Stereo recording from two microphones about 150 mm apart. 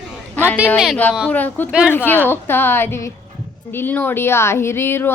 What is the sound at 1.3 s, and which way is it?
Speech, 10° left (ahead or behind).